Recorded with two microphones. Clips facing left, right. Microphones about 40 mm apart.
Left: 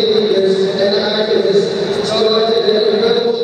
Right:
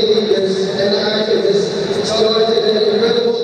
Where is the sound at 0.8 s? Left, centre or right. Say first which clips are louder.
Left 1 dB; centre.